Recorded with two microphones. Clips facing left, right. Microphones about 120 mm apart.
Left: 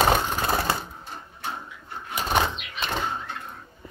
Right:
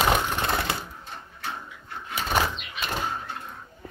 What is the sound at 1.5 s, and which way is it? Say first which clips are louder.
Dog: left 1 dB; 5° left (ahead or behind).